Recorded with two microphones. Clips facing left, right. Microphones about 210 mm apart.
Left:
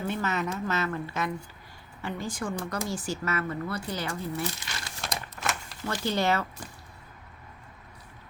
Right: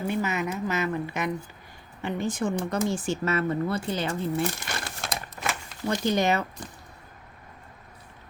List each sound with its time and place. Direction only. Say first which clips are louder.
0.1 s a woman's voice: right 3 dB; 10° right (ahead or behind)
4.4 s crumpling: right 5 dB; 50° right (ahead or behind)
5.4 s a sound: right 1 dB; centre (ahead or behind)
5.8 s speech: right 4 dB; 20° right (ahead or behind)